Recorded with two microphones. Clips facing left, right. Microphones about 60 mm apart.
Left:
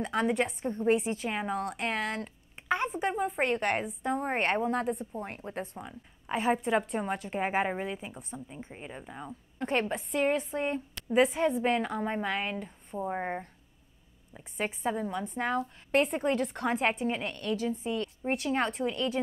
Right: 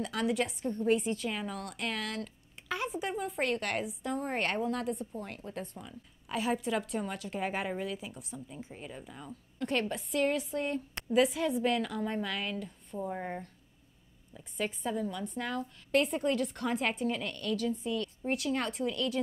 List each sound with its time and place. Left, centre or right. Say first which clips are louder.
0.0 s speech: left 3 dB; left
3.2 s a woman's voice: left 3 dB; left
8.7 s a woman's voice: left 3 dB; left